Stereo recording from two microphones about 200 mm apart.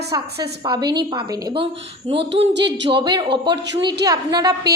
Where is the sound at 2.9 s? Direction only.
25° right (ahead or behind).